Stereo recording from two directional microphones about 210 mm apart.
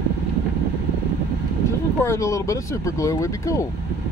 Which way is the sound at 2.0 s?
15° left (ahead or behind).